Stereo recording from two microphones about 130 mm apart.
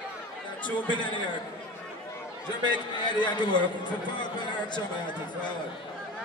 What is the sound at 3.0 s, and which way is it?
Speech, 35° left (ahead or behind).